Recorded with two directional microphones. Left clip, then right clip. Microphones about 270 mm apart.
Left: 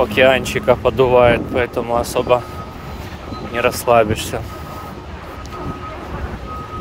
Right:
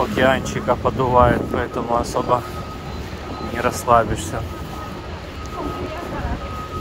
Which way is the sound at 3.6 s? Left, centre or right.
Left.